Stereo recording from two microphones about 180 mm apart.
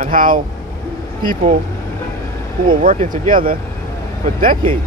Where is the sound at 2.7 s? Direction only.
50° right (ahead or behind).